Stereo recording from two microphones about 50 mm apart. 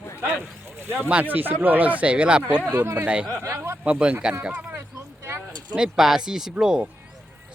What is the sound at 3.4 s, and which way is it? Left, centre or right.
Speech, right.